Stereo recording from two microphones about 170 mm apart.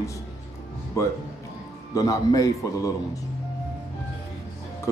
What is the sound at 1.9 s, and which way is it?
Speech, 20° left (ahead or behind).